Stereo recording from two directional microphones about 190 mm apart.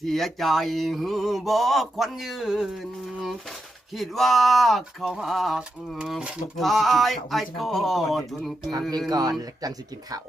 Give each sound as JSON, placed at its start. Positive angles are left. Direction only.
{"t": 0.0, "sound": "speech", "side_deg": 0}
{"t": 3.9, "sound": "speech", "side_deg": 0}
{"t": 9.0, "sound": "speech", "side_deg": -20}